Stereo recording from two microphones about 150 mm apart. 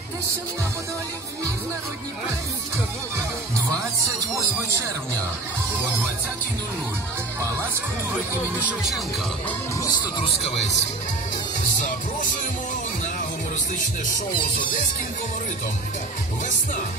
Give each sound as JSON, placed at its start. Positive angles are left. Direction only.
{"t": 8.1, "sound": "speech", "side_deg": -10}
{"t": 9.8, "sound": "speech", "side_deg": 25}
{"t": 10.3, "sound": "speech", "side_deg": 45}